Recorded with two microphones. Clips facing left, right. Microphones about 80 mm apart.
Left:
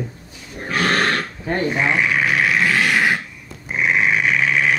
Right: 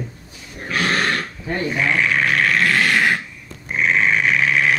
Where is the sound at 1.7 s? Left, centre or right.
Left.